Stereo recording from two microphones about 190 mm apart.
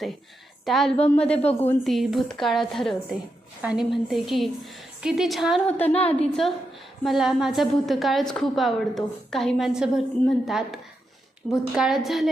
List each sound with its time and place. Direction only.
0.6 s a woman's voice: centre (ahead or behind)
5.8 s a woman's voice: 30° left (ahead or behind)
6.1 s a woman's voice: centre (ahead or behind)